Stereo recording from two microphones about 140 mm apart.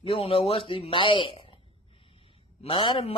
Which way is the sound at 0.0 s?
40° left (ahead or behind).